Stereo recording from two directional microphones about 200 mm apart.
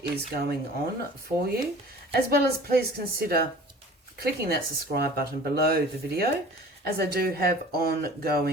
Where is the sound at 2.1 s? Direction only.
50° right (ahead or behind).